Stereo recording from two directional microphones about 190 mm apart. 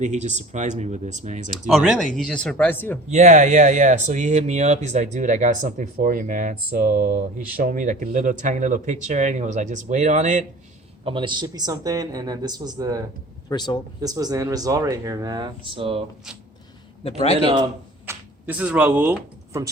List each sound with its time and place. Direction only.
0.0 s speech: 40° right (ahead or behind)
1.7 s speech: centre (ahead or behind)
3.1 s speech: 40° right (ahead or behind)
11.0 s speech: 25° right (ahead or behind)
13.5 s speech: 20° left (ahead or behind)
14.0 s speech: 20° right (ahead or behind)
17.0 s a man's voice: 30° left (ahead or behind)
17.4 s speech: 25° right (ahead or behind)
18.0 s speech: 10° right (ahead or behind)